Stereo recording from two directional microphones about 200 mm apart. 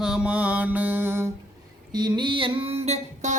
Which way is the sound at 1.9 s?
20° right (ahead or behind).